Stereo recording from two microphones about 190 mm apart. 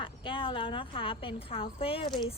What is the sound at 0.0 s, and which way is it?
A woman's voice, 25° left (ahead or behind).